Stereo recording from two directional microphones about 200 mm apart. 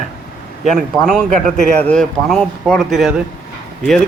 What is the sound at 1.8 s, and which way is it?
Speech, 5° left (ahead or behind).